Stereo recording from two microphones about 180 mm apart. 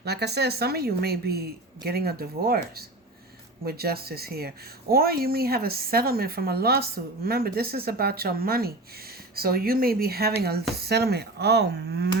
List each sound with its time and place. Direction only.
0.0 s speech: 65° right (ahead or behind)